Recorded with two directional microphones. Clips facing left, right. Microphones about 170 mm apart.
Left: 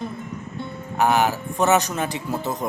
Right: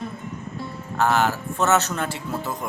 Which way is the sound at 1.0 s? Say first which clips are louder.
Left 1 dB; 15° left (ahead or behind).